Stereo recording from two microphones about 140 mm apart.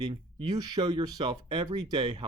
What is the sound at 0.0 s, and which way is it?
Speech, 35° right (ahead or behind).